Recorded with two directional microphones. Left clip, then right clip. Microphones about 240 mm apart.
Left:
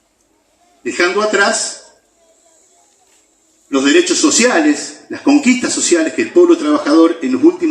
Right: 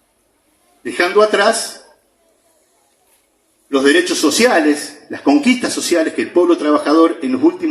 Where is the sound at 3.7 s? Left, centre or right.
Centre.